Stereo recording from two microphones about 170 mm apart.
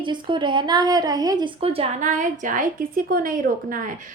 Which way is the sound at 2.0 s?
50° right (ahead or behind).